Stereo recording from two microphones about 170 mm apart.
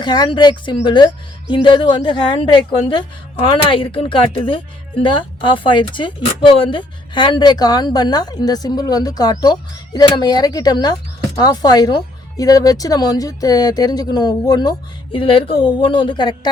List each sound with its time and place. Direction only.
0.0 s a woman's voice: 25° left (ahead or behind)